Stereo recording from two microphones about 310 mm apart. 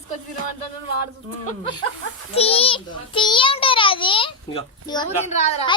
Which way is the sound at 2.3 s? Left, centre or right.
Centre.